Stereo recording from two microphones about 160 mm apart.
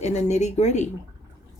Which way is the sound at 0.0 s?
45° left (ahead or behind).